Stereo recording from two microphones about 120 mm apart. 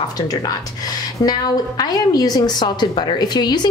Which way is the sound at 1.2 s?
35° left (ahead or behind).